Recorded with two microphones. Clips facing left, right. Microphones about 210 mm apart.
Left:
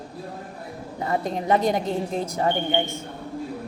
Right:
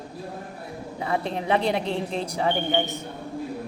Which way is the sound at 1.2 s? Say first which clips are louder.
Left 3 dB; 15° left (ahead or behind).